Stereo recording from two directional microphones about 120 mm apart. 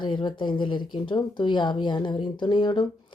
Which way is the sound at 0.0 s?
40° left (ahead or behind).